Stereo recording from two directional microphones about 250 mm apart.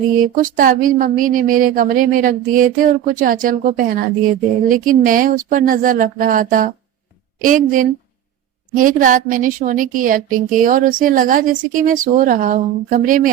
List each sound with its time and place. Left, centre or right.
0.4 s a woman's voice: right